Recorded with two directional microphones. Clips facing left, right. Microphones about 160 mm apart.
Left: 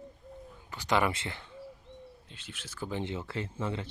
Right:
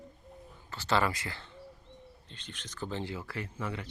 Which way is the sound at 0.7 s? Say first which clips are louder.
Left 1 dB; 15° left (ahead or behind).